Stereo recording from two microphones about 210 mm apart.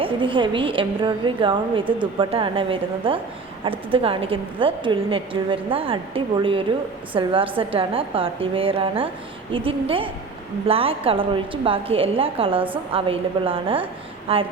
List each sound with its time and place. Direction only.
0.0 s a woman's voice: 25° right (ahead or behind)